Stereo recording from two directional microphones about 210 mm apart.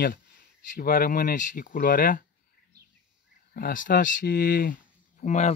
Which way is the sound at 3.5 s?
40° left (ahead or behind).